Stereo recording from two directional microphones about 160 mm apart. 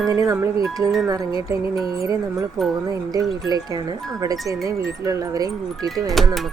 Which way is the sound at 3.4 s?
25° right (ahead or behind).